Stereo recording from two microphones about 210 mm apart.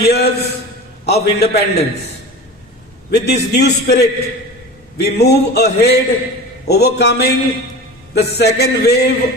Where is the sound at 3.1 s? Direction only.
50° left (ahead or behind).